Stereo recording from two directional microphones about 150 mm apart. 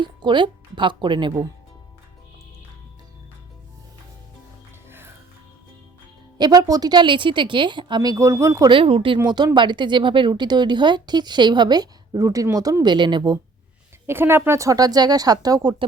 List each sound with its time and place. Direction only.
0.0 s a woman's voice: 30° right (ahead or behind)
4.9 s music: 15° right (ahead or behind)
6.4 s speech: 25° right (ahead or behind)
8.7 s a woman's voice: 35° right (ahead or behind)
14.1 s speech: 15° right (ahead or behind)